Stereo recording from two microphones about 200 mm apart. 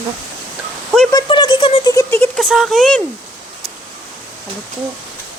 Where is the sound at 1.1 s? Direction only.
20° left (ahead or behind).